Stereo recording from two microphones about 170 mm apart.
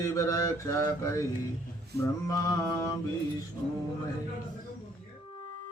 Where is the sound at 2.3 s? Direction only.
20° left (ahead or behind).